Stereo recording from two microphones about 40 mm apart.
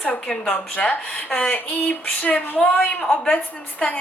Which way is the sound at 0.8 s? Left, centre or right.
Left.